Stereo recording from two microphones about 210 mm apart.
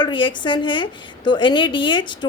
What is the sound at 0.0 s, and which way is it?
A woman's voice, 20° left (ahead or behind).